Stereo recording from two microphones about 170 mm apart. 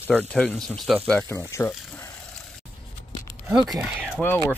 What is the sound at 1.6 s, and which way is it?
Speech, 15° left (ahead or behind).